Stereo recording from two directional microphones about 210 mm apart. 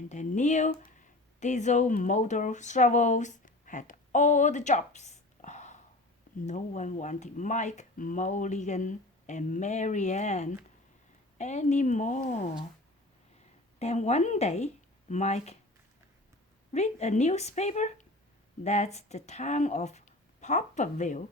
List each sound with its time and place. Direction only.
0.1 s speech: 35° left (ahead or behind)
13.7 s speech: 30° left (ahead or behind)
16.7 s speech: 30° left (ahead or behind)